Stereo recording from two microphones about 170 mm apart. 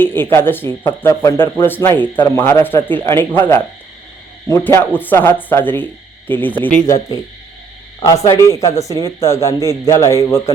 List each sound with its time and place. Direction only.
0.0 s speech: 10° left (ahead or behind)